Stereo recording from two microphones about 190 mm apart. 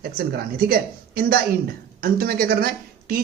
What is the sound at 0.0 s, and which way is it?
Speech, 50° right (ahead or behind).